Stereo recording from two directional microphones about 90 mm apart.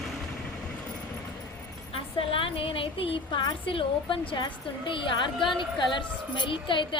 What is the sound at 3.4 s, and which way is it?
A woman's voice, 65° left (ahead or behind).